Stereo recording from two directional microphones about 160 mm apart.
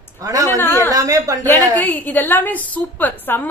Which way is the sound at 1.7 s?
10° left (ahead or behind).